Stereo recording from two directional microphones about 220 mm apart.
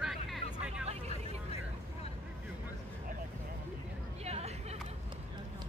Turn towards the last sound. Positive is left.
turn(degrees=-30)  # may be behind; listen again after turning